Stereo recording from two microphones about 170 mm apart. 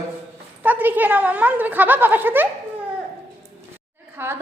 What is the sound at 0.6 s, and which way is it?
Speech, 10° right (ahead or behind).